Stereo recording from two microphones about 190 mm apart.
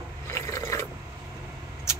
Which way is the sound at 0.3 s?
15° left (ahead or behind).